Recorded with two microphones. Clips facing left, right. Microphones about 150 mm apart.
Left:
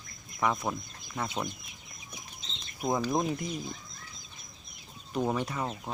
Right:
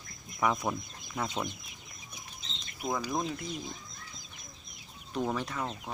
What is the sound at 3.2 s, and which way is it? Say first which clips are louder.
Speech: left 4 dB; 15° left (ahead or behind).